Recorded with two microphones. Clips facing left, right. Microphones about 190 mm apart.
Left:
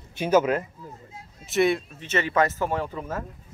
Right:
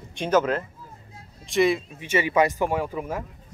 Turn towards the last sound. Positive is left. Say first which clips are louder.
# right 2 dB
turn(degrees=-10)  # may be behind; listen again after turning